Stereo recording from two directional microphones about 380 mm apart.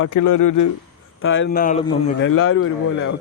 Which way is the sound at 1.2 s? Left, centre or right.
Left.